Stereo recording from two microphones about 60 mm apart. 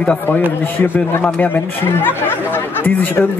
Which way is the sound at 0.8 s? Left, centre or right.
Left.